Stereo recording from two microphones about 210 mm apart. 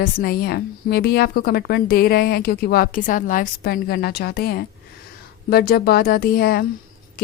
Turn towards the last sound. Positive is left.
turn(degrees=45)  # may be behind; listen again after turning